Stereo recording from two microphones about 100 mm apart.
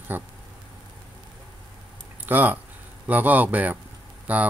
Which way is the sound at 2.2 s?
20° right (ahead or behind).